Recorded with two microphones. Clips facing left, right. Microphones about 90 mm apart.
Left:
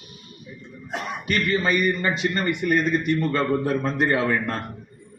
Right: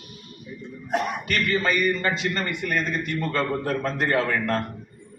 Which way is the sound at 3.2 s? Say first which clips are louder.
Left 3 dB; 5° left (ahead or behind).